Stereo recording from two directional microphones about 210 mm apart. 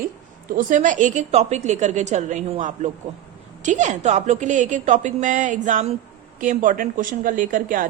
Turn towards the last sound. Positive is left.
turn(degrees=-40)  # may be behind; listen again after turning